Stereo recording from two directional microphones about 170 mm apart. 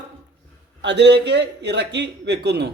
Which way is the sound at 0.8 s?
90° right.